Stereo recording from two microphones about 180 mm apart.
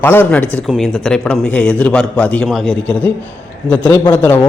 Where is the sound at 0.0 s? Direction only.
10° left (ahead or behind).